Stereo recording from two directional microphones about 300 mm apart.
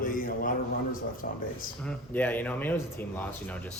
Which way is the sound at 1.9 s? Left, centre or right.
Centre.